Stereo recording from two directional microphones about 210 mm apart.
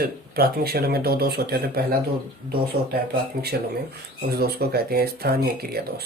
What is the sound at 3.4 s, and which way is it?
Speech, 50° right (ahead or behind).